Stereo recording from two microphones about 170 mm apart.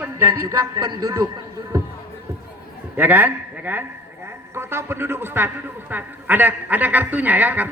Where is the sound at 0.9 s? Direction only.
20° right (ahead or behind).